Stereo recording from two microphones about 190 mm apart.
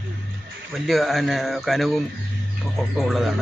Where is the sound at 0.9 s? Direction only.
Centre (ahead or behind).